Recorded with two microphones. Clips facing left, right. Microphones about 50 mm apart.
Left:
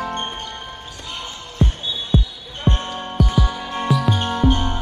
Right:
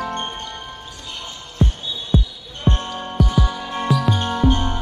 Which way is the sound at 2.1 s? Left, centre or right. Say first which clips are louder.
Right 1 dB; centre.